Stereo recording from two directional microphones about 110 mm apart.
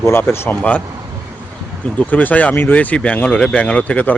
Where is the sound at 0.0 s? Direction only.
20° left (ahead or behind).